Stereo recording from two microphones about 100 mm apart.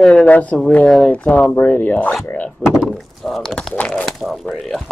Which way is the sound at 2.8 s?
Centre (ahead or behind).